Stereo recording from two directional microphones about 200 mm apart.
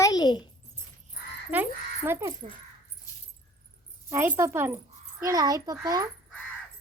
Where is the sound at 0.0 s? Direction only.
20° left (ahead or behind).